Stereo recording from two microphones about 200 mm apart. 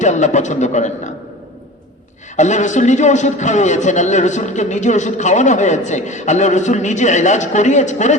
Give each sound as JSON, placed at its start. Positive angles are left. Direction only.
{"t": 0.0, "sound": "a man's voice", "side_deg": 35}
{"t": 2.3, "sound": "a man's voice", "side_deg": 35}